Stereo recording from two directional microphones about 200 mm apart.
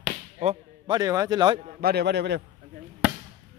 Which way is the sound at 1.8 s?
55° right (ahead or behind).